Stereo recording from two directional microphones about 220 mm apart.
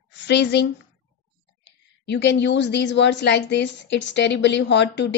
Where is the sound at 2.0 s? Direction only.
50° left (ahead or behind).